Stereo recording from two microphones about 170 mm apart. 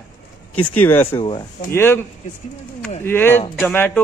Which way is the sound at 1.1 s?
30° left (ahead or behind).